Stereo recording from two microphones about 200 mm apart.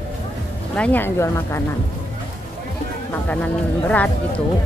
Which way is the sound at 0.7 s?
5° left (ahead or behind).